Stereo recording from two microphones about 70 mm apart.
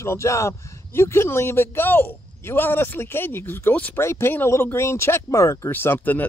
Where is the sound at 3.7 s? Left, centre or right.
Left.